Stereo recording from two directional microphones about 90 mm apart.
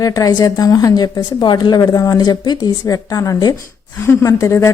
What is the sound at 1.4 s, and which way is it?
Speech, 55° left (ahead or behind).